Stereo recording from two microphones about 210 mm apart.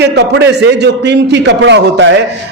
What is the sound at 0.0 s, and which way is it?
A man's voice, 55° right (ahead or behind).